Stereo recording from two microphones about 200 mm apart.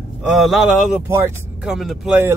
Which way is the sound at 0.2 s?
Centre (ahead or behind).